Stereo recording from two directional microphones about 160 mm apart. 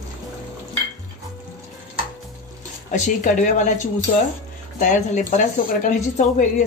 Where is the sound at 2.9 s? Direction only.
50° left (ahead or behind).